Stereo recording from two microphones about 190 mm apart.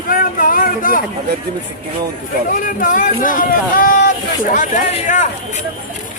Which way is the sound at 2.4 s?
45° left (ahead or behind).